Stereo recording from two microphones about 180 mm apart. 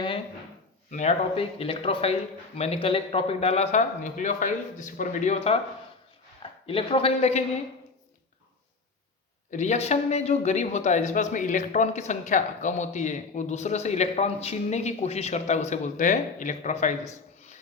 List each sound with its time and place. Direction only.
0.9 s speech: 40° left (ahead or behind)
9.5 s speech: 40° left (ahead or behind)